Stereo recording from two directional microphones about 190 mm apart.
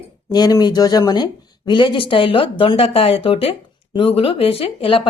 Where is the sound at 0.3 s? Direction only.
20° left (ahead or behind).